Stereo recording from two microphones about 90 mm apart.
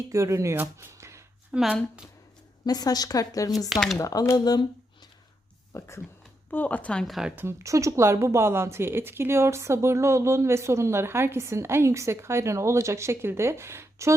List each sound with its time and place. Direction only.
0.1 s speech: 35° right (ahead or behind)
0.5 s speech: 20° right (ahead or behind)
0.9 s a sound: 30° right (ahead or behind)
1.5 s speech: 10° right (ahead or behind)
2.6 s a woman's voice: 45° left (ahead or behind)
3.7 s speech: centre (ahead or behind)
3.9 s speech: 40° left (ahead or behind)
4.4 s a woman's voice: 50° left (ahead or behind)
5.7 s speech: 35° left (ahead or behind)
6.5 s speech: 20° left (ahead or behind)
7.1 s speech: 5° right (ahead or behind)
7.3 s speech: 30° right (ahead or behind)